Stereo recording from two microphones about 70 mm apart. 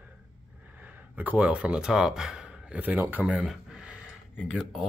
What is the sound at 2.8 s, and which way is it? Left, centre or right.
Speech, right.